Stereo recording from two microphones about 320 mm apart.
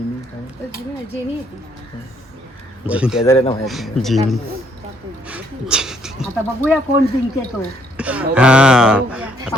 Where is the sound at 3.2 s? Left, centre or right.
Centre.